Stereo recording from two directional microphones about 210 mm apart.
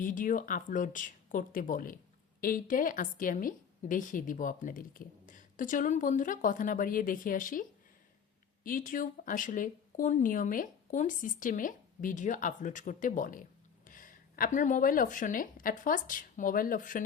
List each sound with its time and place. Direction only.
0.0 s a woman's voice: 40° left (ahead or behind)